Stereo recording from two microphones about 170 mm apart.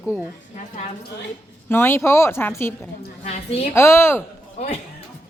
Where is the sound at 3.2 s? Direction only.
35° left (ahead or behind).